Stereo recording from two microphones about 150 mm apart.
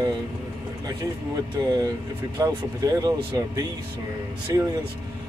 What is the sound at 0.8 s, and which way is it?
Speech, 25° right (ahead or behind).